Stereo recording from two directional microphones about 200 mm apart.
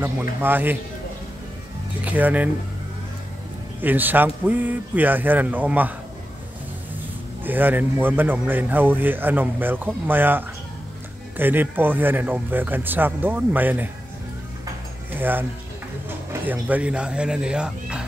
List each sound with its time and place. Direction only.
0.0 s speech: 10° right (ahead or behind)
2.0 s speech: 10° right (ahead or behind)
3.8 s speech: 10° right (ahead or behind)
7.4 s speech: 10° right (ahead or behind)
15.1 s speech: 10° right (ahead or behind)
16.4 s speech: 5° right (ahead or behind)